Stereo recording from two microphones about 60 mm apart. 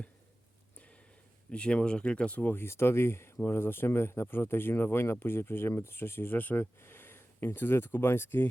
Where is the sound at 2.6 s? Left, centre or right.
Left.